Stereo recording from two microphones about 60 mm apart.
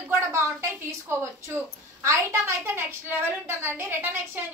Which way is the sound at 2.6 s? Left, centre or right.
Right.